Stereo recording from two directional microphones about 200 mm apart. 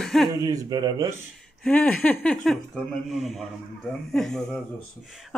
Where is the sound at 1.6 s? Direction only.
5° left (ahead or behind).